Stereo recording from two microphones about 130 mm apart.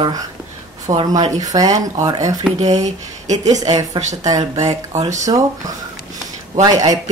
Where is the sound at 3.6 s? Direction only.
30° right (ahead or behind).